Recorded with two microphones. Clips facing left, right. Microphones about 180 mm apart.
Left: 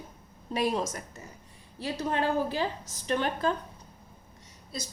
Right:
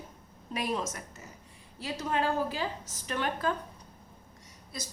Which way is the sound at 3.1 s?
30° left (ahead or behind).